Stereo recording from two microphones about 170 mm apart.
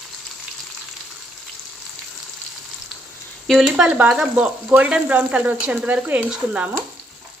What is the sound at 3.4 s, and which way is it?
Frying, centre (ahead or behind).